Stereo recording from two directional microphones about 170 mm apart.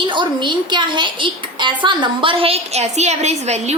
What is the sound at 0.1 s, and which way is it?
A woman's voice, 30° right (ahead or behind).